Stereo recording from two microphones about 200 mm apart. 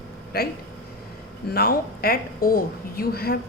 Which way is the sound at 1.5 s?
50° left (ahead or behind).